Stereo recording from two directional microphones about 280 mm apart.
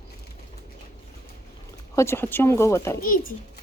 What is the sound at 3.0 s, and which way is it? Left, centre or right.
Speech, left.